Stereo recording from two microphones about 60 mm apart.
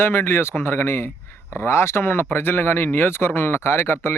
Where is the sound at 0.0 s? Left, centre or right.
Left.